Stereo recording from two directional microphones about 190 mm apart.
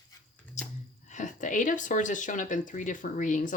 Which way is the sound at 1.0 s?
40° left (ahead or behind).